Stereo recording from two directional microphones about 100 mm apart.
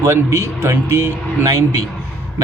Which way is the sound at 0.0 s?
30° right (ahead or behind).